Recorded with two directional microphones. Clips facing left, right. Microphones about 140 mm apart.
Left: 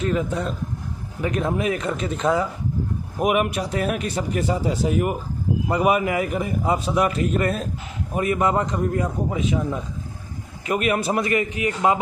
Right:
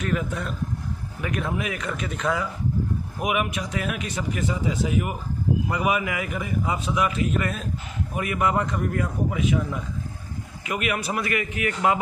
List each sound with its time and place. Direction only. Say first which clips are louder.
0.0 s a man's voice: left 4 dB; 25° left (ahead or behind)
3.2 s a man's voice: left 6 dB; 40° left (ahead or behind); by 9.8 s 25° left (ahead or behind)
10.7 s a man's voice: left 5 dB; 35° left (ahead or behind)